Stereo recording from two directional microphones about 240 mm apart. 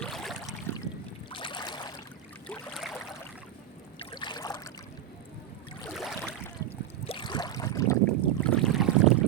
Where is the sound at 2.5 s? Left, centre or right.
Centre.